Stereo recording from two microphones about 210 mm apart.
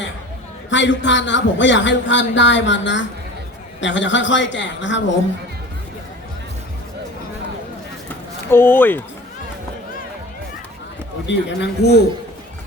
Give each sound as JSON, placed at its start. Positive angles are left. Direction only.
{"t": 0.7, "sound": "speech", "side_deg": 60}
{"t": 8.4, "sound": "speech", "side_deg": 10}
{"t": 11.3, "sound": "speech", "side_deg": 55}